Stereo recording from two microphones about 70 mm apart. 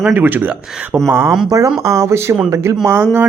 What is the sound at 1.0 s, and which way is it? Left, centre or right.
Speech, right.